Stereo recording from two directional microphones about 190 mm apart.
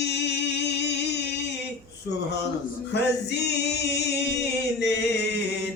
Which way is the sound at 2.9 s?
60° left (ahead or behind).